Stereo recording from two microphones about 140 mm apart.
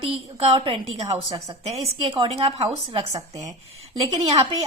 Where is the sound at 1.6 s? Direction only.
45° right (ahead or behind).